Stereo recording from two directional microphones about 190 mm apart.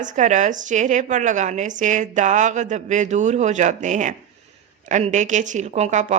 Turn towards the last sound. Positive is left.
turn(degrees=-40)  # may be behind; listen again after turning